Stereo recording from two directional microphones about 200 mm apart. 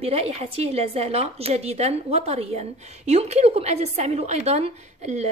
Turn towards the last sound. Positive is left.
turn(degrees=-35)  # may be behind; listen again after turning